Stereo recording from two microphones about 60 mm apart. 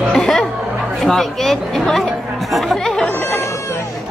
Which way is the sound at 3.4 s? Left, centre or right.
Left.